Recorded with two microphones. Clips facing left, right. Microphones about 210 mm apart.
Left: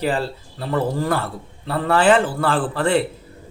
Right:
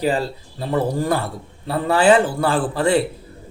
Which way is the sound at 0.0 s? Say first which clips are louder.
Right 2 dB; 15° right (ahead or behind).